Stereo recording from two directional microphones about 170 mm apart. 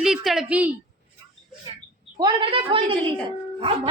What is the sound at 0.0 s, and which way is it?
Speech, 5° right (ahead or behind).